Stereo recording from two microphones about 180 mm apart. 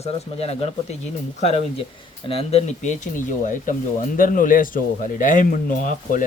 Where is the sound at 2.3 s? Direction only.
35° left (ahead or behind).